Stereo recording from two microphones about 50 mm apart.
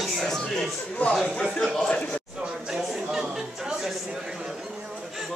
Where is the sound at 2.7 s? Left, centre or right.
Centre.